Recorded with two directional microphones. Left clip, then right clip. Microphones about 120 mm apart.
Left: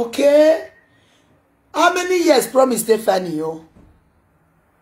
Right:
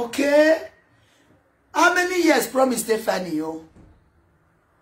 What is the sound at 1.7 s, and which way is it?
Speech, 25° right (ahead or behind).